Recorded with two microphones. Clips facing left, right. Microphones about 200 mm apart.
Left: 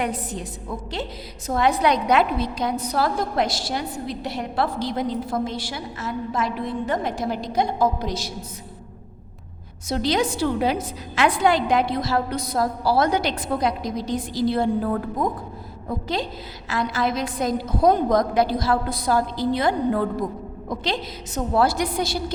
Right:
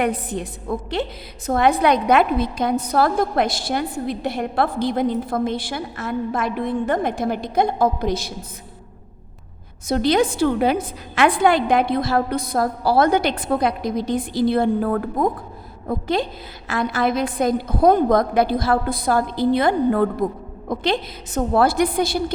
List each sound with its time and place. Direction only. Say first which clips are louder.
0.0 s a woman's voice: right 5 dB; 60° right (ahead or behind)
9.9 s a woman's voice: right 4 dB; 55° right (ahead or behind)